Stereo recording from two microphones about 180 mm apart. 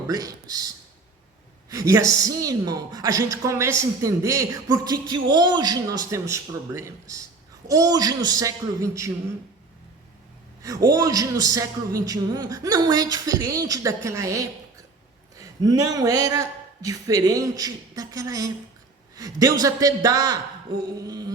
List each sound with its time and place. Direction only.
0.1 s a man's voice: 20° right (ahead or behind)
1.7 s a man's voice: 15° right (ahead or behind)
10.6 s a man's voice: 20° right (ahead or behind)